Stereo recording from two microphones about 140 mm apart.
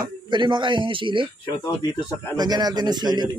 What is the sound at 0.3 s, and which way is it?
A man's voice, 35° right (ahead or behind).